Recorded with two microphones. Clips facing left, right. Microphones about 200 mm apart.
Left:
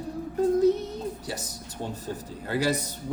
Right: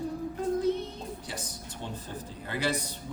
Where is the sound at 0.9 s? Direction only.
40° left (ahead or behind).